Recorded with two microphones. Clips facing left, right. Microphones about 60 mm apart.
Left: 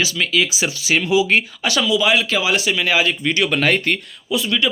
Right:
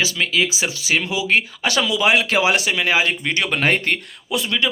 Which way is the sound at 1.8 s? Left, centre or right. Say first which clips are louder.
Left 1 dB; right.